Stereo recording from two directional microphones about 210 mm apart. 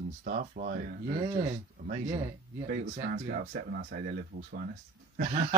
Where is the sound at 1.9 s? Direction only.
35° right (ahead or behind).